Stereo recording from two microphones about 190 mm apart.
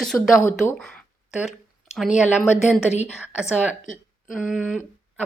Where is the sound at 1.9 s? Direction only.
Centre (ahead or behind).